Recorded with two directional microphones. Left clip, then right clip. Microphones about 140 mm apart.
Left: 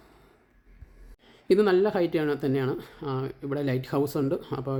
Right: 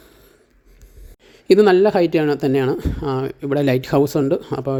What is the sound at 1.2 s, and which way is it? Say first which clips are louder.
Speech: right 10 dB; 50° right (ahead or behind).